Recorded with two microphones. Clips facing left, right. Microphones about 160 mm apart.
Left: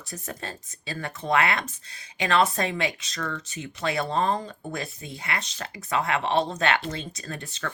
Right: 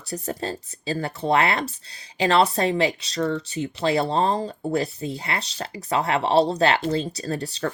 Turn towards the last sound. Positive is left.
turn(degrees=-35)  # may be behind; listen again after turning